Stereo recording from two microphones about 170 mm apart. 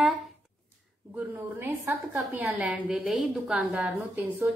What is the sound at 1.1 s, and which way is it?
A woman's voice, 10° right (ahead or behind).